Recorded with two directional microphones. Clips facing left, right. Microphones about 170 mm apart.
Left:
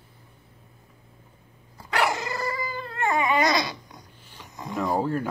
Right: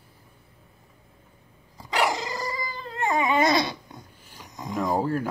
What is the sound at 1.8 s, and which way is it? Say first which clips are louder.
Cat: even; 15° right (ahead or behind).